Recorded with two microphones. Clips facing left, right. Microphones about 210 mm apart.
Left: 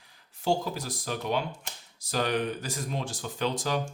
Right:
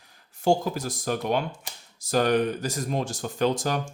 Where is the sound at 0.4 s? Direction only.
45° right (ahead or behind).